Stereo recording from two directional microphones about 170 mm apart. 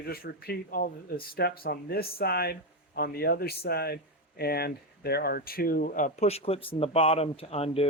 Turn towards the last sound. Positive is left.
turn(degrees=35)  # may be behind; listen again after turning